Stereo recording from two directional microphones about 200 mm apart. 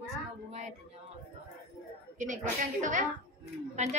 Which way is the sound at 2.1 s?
40° right (ahead or behind).